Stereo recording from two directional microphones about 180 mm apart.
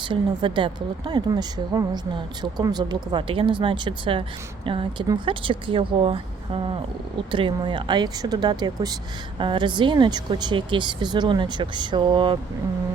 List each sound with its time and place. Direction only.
0.0 s a woman's voice: 25° right (ahead or behind)